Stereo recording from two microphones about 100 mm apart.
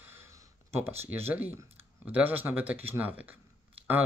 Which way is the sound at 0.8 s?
25° right (ahead or behind).